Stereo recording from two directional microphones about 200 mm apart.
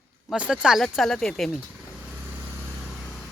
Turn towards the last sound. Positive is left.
turn(degrees=5)  # may be behind; listen again after turning